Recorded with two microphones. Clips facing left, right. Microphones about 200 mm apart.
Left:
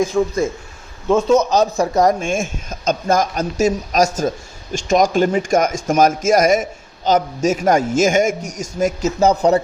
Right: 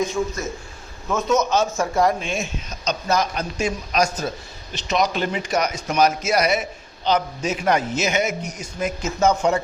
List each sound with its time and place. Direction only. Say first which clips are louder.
0.0 s a man's voice: left 7 dB; 30° left (ahead or behind)